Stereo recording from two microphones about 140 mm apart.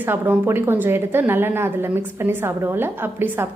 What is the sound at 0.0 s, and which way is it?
Speech, 15° right (ahead or behind).